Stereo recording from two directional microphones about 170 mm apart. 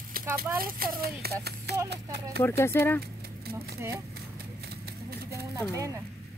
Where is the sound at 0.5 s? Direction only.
60° right (ahead or behind).